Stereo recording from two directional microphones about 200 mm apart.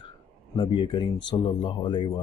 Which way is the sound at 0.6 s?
25° left (ahead or behind).